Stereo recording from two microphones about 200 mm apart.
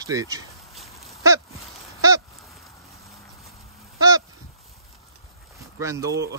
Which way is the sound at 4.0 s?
15° right (ahead or behind).